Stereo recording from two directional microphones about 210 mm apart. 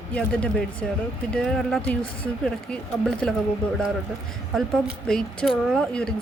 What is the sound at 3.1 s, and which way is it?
Speech, 5° left (ahead or behind).